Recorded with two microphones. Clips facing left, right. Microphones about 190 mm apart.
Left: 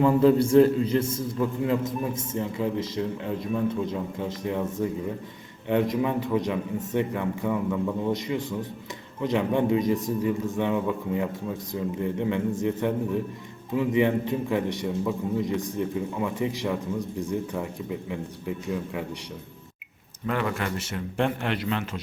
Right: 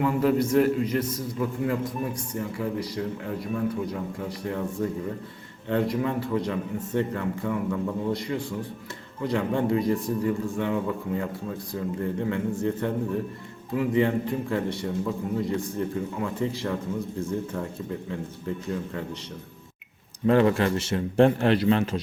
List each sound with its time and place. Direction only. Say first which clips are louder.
0.0 s a man's voice: left 4 dB; 30° left (ahead or behind); by 19.0 s 15° left (ahead or behind)
20.2 s a man's voice: right 8 dB; 30° right (ahead or behind)